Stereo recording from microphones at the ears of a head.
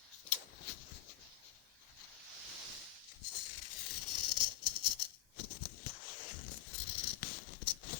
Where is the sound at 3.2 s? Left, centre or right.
Left.